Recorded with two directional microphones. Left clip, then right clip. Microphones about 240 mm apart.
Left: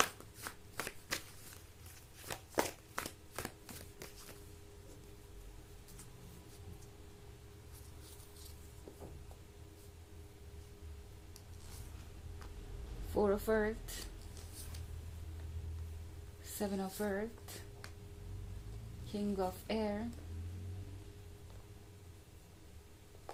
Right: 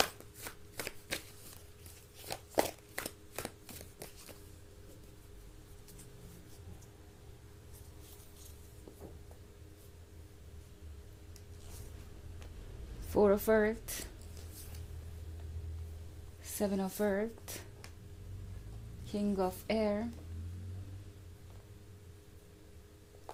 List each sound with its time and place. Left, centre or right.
0.8 s shuffling cards: centre
2.2 s shuffling cards: centre
13.1 s a woman's voice: right
16.4 s a woman's voice: right
19.1 s a woman's voice: right